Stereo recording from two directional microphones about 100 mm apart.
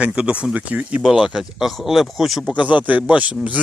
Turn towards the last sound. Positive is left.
turn(degrees=-10)  # may be behind; listen again after turning